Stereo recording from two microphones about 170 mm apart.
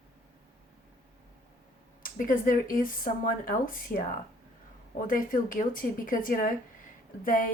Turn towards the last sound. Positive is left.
turn(degrees=55)  # may be behind; listen again after turning